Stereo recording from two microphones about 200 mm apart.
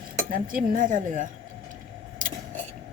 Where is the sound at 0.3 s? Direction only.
45° right (ahead or behind).